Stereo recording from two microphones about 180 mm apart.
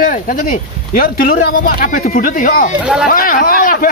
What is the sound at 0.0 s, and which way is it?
Speech, 50° left (ahead or behind).